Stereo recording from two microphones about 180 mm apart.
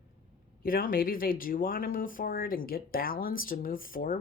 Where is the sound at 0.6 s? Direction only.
55° left (ahead or behind).